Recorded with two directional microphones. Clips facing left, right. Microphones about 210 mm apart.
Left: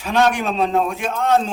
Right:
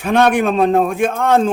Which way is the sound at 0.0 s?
55° right (ahead or behind).